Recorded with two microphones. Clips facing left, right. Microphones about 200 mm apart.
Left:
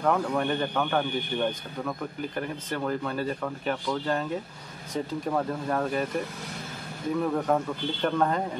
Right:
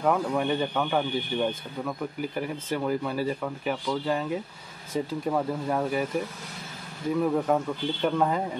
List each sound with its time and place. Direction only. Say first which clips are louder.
0.0 s a man's voice: right 1 dB; 5° right (ahead or behind)
7.3 s a man's voice: right 1 dB; 5° right (ahead or behind)